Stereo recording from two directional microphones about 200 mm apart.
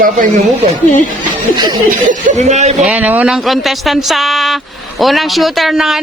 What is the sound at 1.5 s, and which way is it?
Snicker, 20° right (ahead or behind).